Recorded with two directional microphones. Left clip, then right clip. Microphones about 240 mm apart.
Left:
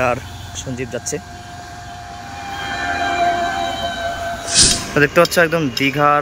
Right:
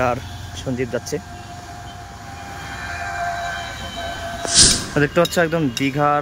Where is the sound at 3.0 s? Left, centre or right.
Left.